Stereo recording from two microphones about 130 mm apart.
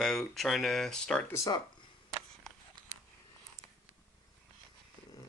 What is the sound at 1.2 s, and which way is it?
Speech, 25° left (ahead or behind).